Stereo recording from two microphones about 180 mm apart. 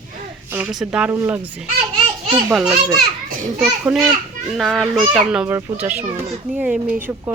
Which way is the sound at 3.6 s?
5° right (ahead or behind).